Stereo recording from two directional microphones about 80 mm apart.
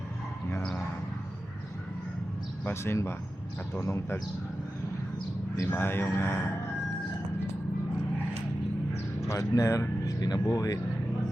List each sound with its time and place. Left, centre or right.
2.6 s speech: left
5.7 s a man's voice: left
9.2 s speech: left